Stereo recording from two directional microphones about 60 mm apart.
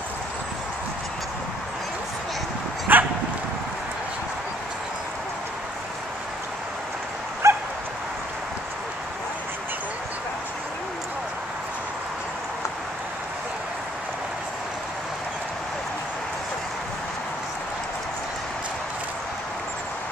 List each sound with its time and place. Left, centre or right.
2.9 s dog: right
7.4 s dog: right